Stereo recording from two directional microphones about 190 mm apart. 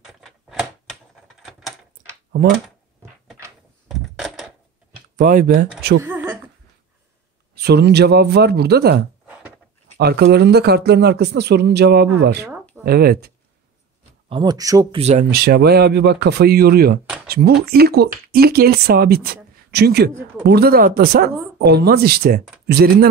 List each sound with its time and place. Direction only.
0.0 s typewriter: centre (ahead or behind)
1.4 s a sound: centre (ahead or behind)
3.9 s a sound: centre (ahead or behind)
5.1 s speech: 45° right (ahead or behind)
6.0 s a sound: 10° right (ahead or behind)
7.5 s speech: 60° right (ahead or behind)
14.3 s speech: 20° right (ahead or behind)
15.0 s speech: 35° right (ahead or behind)
15.3 s speech: 55° right (ahead or behind)